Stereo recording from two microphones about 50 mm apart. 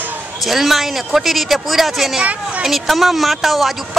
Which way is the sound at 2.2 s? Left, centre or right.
Right.